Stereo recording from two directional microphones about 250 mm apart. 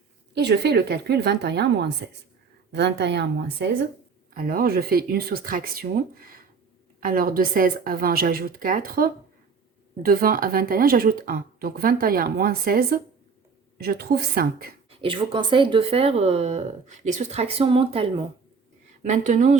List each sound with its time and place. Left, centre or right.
0.3 s a woman's voice: right
4.4 s speech: right
15.0 s speech: right